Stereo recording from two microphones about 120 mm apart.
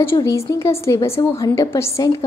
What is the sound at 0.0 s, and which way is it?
A woman's voice, 20° left (ahead or behind).